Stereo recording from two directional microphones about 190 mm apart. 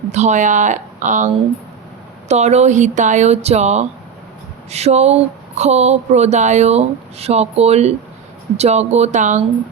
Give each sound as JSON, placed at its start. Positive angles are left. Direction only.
{"t": 0.1, "sound": "speech", "side_deg": -35}
{"t": 2.3, "sound": "speech", "side_deg": -35}